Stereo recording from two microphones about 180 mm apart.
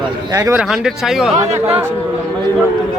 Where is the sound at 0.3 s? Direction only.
15° right (ahead or behind).